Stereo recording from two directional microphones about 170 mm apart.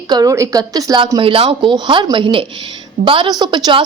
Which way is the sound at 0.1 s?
20° right (ahead or behind).